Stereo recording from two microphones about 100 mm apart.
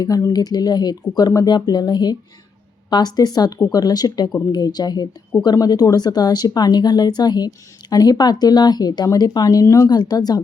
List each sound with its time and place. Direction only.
0.0 s speech: 40° left (ahead or behind)